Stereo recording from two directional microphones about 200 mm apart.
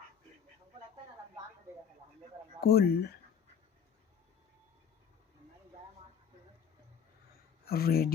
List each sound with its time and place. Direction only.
2.6 s speech: 50° left (ahead or behind)
7.6 s speech: 50° left (ahead or behind)